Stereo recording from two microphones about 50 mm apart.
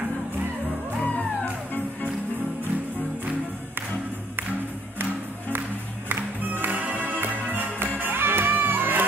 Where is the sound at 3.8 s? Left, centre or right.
Right.